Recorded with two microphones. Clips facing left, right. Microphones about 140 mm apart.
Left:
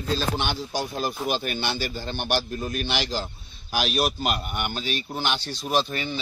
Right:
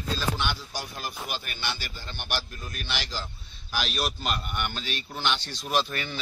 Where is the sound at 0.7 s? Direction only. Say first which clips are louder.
Left 8 dB; 25° left (ahead or behind).